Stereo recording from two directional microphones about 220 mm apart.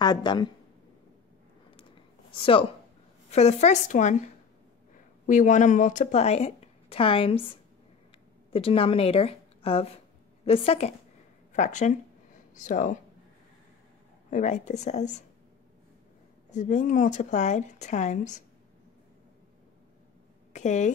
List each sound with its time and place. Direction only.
0.0 s a woman's voice: 20° left (ahead or behind)
2.3 s a woman's voice: 25° left (ahead or behind)
5.2 s a woman's voice: 35° left (ahead or behind)
14.3 s speech: 35° left (ahead or behind)
16.5 s speech: 35° left (ahead or behind)
20.5 s speech: 30° left (ahead or behind)